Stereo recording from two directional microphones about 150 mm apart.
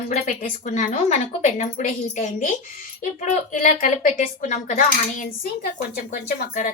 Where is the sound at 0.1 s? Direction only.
55° left (ahead or behind).